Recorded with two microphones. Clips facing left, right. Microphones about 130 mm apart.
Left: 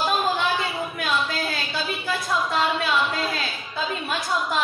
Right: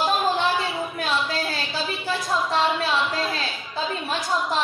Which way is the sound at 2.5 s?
30° right (ahead or behind).